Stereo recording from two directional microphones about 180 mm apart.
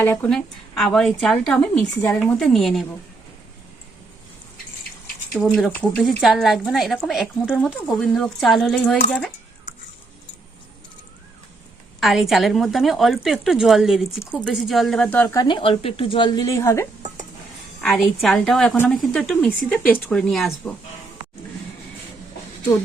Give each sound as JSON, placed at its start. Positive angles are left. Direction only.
{"t": 0.0, "sound": "a woman's voice", "side_deg": 10}
{"t": 5.3, "sound": "a woman's voice", "side_deg": 0}
{"t": 11.9, "sound": "a woman's voice", "side_deg": 0}
{"t": 17.7, "sound": "a woman's voice", "side_deg": 5}